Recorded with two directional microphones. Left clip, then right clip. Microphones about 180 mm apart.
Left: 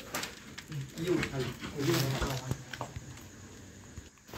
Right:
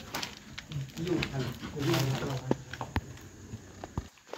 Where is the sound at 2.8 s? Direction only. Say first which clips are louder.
Right 1 dB; 15° right (ahead or behind).